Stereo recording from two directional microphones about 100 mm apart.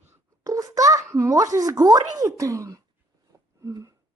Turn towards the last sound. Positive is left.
turn(degrees=-35)  # may be behind; listen again after turning